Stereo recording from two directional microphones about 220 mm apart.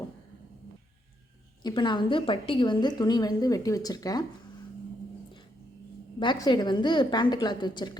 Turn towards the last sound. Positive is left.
turn(degrees=20)  # may be behind; listen again after turning